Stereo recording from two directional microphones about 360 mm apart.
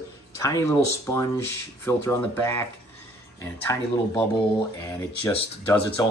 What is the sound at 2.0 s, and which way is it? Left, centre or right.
Speech, centre.